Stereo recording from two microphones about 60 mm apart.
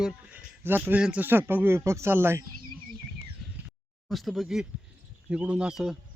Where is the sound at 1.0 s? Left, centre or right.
Centre.